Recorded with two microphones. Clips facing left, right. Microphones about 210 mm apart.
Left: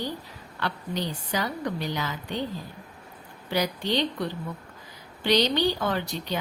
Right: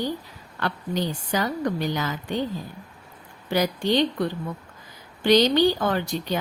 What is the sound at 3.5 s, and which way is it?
A woman's voice, 45° right (ahead or behind).